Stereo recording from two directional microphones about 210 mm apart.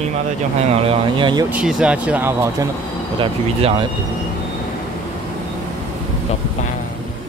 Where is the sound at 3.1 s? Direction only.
25° right (ahead or behind).